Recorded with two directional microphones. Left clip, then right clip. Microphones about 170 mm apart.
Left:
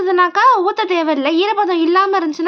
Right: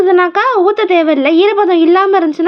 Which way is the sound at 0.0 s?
20° right (ahead or behind).